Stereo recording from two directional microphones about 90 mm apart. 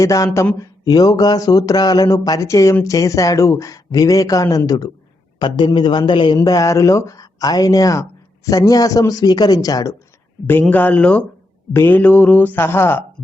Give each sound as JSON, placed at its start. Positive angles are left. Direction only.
{"t": 0.0, "sound": "a man's voice", "side_deg": 40}
{"t": 5.4, "sound": "a man's voice", "side_deg": 55}
{"t": 10.4, "sound": "speech", "side_deg": 20}